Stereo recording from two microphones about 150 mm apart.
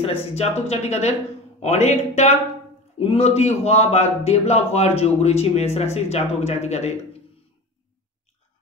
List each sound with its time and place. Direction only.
0.0 s a man's voice: 45° left (ahead or behind)